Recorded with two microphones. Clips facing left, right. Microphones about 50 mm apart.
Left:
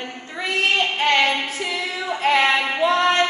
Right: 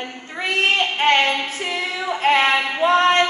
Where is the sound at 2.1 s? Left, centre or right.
Right.